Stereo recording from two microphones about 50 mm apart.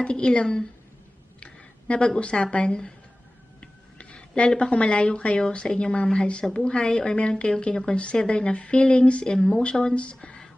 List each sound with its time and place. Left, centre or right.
0.0 s speech: left